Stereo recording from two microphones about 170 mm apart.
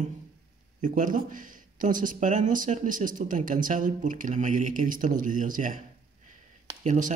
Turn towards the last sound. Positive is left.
turn(degrees=-45)  # may be behind; listen again after turning